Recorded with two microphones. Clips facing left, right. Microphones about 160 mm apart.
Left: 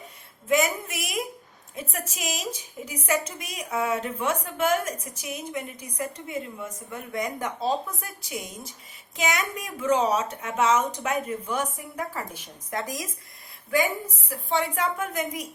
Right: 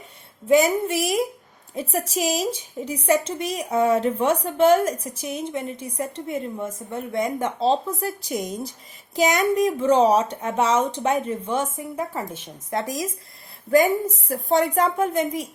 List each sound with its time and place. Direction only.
0.4 s a woman's voice: 30° right (ahead or behind)
13.7 s a woman's voice: 40° right (ahead or behind)